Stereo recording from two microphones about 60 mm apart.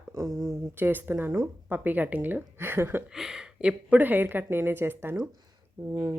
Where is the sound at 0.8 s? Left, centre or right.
Right.